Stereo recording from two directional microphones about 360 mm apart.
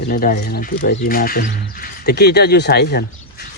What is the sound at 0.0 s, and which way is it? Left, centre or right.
Speech, left.